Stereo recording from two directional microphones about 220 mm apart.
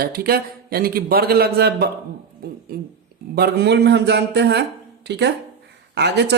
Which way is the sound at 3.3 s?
45° right (ahead or behind).